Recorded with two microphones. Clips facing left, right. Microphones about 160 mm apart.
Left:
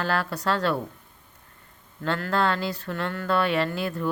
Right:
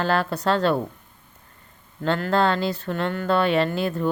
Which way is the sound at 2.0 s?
25° right (ahead or behind).